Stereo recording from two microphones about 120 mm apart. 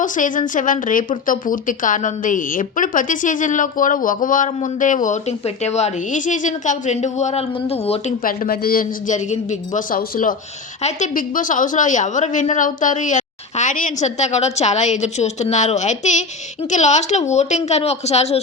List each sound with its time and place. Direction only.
0.0 s a woman's voice: 90° left
5.6 s speech: 65° left (ahead or behind)
9.0 s a woman's voice: 85° left; by 18.3 s 65° left (ahead or behind)